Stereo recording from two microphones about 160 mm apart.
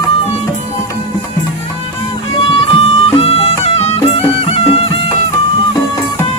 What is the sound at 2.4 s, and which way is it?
Music, 35° left (ahead or behind).